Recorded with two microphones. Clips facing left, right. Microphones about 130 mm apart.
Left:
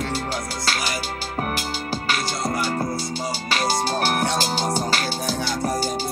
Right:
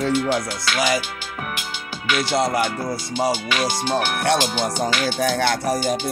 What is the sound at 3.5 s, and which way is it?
Music, 40° left (ahead or behind).